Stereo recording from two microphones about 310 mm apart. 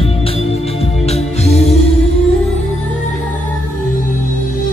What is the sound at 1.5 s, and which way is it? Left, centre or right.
Music, left.